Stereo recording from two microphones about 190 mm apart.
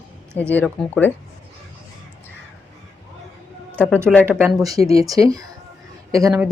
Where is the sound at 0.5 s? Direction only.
5° left (ahead or behind).